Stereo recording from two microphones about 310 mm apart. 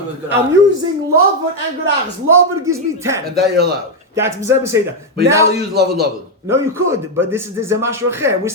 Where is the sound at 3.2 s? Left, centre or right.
Right.